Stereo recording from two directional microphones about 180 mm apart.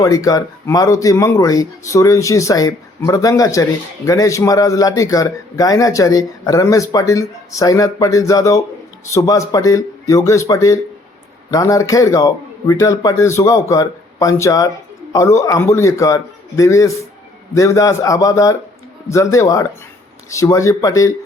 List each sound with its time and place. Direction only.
0.0 s a man's voice: 20° left (ahead or behind)